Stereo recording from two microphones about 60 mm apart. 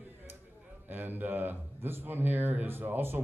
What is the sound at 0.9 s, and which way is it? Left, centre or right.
A man's voice, right.